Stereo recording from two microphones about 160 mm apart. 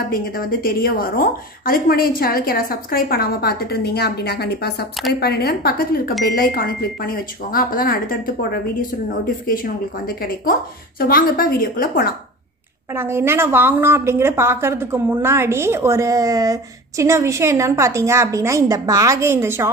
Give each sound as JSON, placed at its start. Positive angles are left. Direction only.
{"t": 0.1, "sound": "a woman's voice", "side_deg": 60}
{"t": 10.0, "sound": "speech", "side_deg": 65}
{"t": 12.9, "sound": "a woman's voice", "side_deg": -15}